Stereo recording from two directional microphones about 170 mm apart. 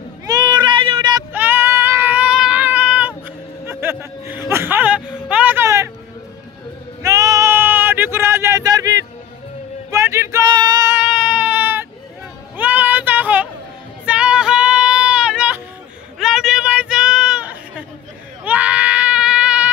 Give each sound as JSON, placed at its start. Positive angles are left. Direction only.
{"t": 0.3, "sound": "child singing", "side_deg": -25}
{"t": 1.3, "sound": "child singing", "side_deg": -10}
{"t": 7.0, "sound": "sheep", "side_deg": -20}
{"t": 9.8, "sound": "a sound", "side_deg": -15}
{"t": 11.1, "sound": "baby cry", "side_deg": -5}
{"t": 12.5, "sound": "a sound", "side_deg": -10}
{"t": 14.0, "sound": "child singing", "side_deg": -5}
{"t": 16.2, "sound": "a sound", "side_deg": 0}
{"t": 18.4, "sound": "goat", "side_deg": -10}